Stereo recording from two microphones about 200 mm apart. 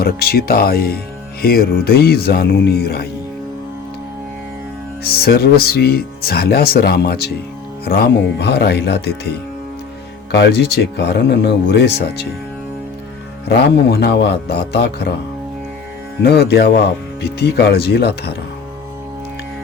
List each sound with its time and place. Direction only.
0.0 s speech: 50° left (ahead or behind)
5.0 s speech: 50° left (ahead or behind)
10.3 s speech: 60° left (ahead or behind)
13.8 s speech: 55° left (ahead or behind)
16.2 s speech: 55° left (ahead or behind)